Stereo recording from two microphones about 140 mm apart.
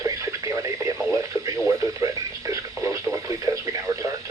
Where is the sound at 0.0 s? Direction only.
25° right (ahead or behind).